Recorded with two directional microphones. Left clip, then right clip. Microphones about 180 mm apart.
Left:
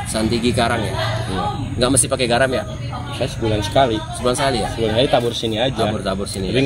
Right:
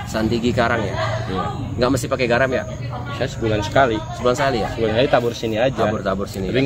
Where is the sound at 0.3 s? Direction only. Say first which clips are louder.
Left 2 dB; 35° right (ahead or behind).